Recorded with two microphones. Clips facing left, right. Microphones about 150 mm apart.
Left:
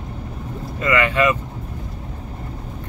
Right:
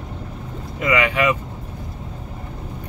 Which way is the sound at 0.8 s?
15° right (ahead or behind).